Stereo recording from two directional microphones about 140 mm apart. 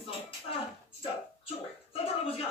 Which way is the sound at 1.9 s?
40° left (ahead or behind).